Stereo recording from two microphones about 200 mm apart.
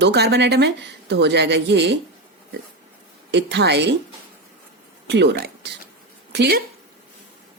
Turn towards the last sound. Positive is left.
turn(degrees=-55)  # may be behind; listen again after turning